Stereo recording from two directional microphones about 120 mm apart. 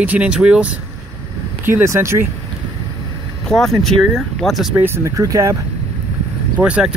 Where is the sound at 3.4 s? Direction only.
5° left (ahead or behind).